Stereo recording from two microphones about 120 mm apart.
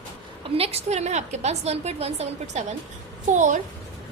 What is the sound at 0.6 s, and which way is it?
A woman's voice, 60° right (ahead or behind).